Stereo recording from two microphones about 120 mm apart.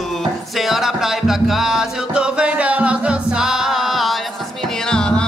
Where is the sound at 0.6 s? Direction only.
5° right (ahead or behind).